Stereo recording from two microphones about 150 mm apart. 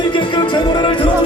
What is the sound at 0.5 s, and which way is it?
Music, 30° left (ahead or behind).